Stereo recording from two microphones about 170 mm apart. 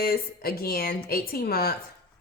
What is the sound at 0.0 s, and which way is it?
Speech, 65° left (ahead or behind).